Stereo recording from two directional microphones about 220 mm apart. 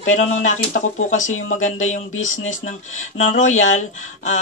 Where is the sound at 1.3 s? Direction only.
65° left (ahead or behind).